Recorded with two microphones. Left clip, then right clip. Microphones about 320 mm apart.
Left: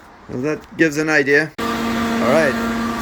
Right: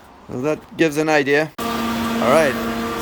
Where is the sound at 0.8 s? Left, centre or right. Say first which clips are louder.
Left 1 dB; centre.